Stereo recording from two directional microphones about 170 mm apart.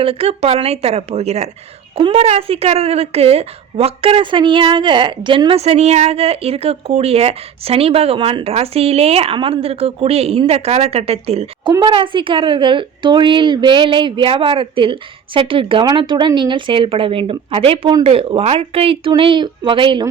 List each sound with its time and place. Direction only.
0.0 s a woman's voice: 35° right (ahead or behind)